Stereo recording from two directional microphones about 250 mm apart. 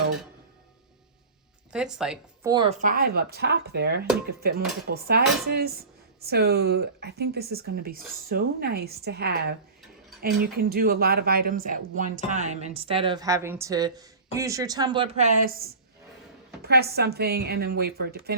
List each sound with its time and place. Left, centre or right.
1.7 s a woman's voice: centre
2.5 s speech: centre
2.7 s speech: right